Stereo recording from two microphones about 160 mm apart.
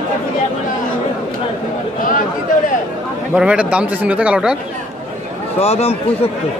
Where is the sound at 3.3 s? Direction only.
5° right (ahead or behind).